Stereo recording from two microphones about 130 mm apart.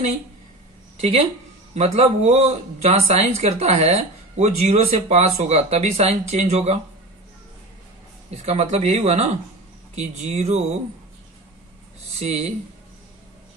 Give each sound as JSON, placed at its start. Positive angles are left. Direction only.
{"t": 1.8, "sound": "speech", "side_deg": -55}
{"t": 8.3, "sound": "speech", "side_deg": -55}
{"t": 12.2, "sound": "speech", "side_deg": -55}